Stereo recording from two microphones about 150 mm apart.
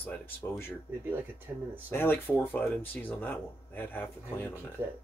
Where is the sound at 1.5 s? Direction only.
10° right (ahead or behind).